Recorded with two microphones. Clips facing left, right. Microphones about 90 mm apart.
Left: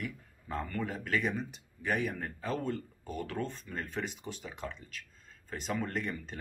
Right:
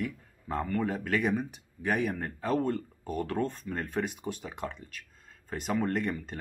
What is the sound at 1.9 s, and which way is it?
Speech, 55° right (ahead or behind).